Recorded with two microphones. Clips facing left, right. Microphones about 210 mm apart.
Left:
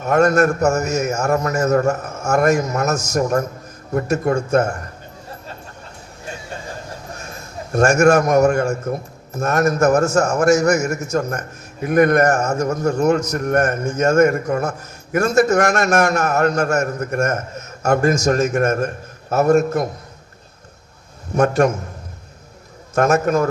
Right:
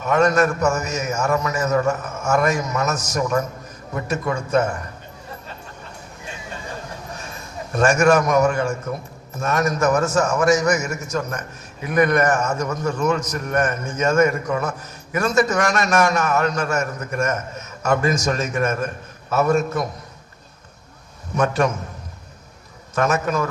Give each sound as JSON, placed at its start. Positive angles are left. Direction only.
{"t": 0.0, "sound": "a man's voice", "side_deg": 50}
{"t": 7.7, "sound": "a man's voice", "side_deg": 50}
{"t": 21.3, "sound": "a man's voice", "side_deg": 50}
{"t": 23.0, "sound": "a man's voice", "side_deg": 50}